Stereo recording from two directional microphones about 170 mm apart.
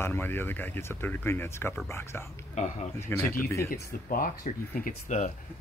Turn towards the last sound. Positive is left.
turn(degrees=50)  # may be behind; listen again after turning